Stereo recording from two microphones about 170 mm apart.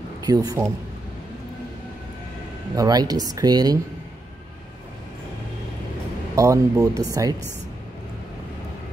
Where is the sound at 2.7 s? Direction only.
20° right (ahead or behind).